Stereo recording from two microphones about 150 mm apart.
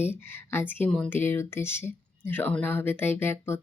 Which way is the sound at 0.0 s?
15° left (ahead or behind).